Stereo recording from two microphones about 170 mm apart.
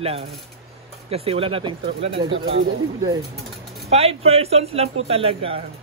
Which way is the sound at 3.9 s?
35° right (ahead or behind).